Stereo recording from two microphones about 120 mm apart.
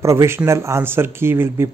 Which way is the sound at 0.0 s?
25° right (ahead or behind).